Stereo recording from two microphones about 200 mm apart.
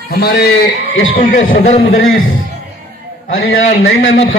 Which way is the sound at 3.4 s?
80° left.